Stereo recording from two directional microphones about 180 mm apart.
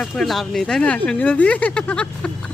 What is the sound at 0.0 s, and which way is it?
Speech, centre (ahead or behind).